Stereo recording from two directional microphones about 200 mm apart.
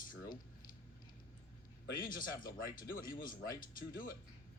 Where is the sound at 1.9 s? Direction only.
45° left (ahead or behind).